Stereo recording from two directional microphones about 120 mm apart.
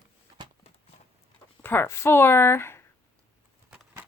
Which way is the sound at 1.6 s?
15° left (ahead or behind).